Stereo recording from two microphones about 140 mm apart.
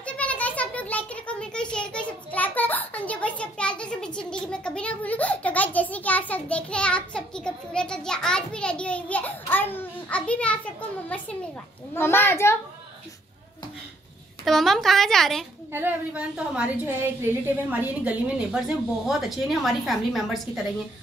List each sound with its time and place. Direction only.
0.0 s a sound: 10° left (ahead or behind)
9.5 s a child's voice: 15° left (ahead or behind)
14.4 s a woman's voice: centre (ahead or behind)
15.7 s a woman's voice: 10° right (ahead or behind)